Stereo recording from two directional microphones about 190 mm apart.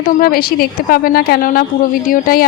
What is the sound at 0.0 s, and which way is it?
A woman's voice, 50° left (ahead or behind).